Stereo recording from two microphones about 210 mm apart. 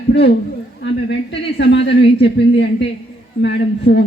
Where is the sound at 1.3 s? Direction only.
55° left (ahead or behind).